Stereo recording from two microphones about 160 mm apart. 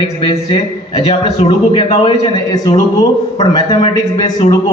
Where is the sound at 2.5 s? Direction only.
20° left (ahead or behind).